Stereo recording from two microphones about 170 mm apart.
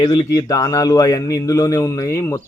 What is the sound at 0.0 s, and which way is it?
Speech, 25° left (ahead or behind).